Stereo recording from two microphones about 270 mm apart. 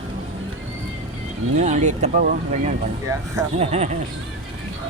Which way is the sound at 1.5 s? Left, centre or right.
Right.